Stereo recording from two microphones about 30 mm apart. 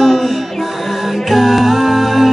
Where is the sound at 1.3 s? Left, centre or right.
Centre.